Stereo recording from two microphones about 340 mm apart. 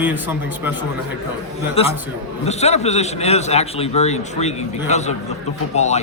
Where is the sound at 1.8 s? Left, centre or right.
Centre.